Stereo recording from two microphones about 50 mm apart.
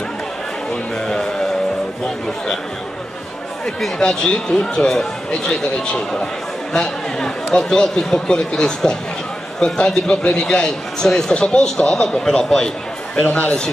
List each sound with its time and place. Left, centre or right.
1.0 s music: centre
4.0 s speech: centre
13.2 s a man's voice: left